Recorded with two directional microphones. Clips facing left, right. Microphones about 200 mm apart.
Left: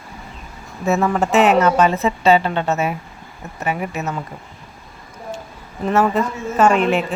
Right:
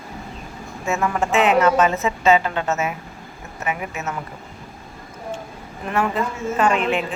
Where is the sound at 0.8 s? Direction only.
40° left (ahead or behind).